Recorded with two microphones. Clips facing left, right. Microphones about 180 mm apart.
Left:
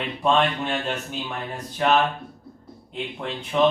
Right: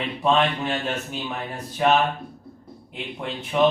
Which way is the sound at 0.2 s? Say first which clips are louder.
Even; 5° right (ahead or behind).